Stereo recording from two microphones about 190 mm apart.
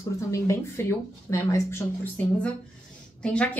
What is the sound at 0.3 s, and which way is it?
A woman's voice, 15° left (ahead or behind).